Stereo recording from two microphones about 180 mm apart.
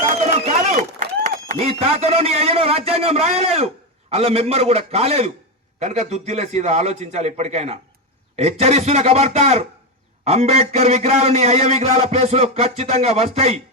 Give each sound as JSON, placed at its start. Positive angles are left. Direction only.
{"t": 0.3, "sound": "a man's voice", "side_deg": -40}